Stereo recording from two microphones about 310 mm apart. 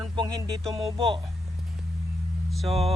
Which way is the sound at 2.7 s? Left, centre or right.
Centre.